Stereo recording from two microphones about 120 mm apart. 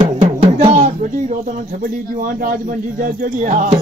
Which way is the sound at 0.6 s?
70° right (ahead or behind).